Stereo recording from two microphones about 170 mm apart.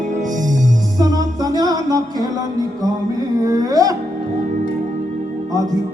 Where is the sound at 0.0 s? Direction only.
45° right (ahead or behind).